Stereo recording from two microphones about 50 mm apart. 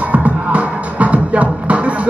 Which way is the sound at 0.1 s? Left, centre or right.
Right.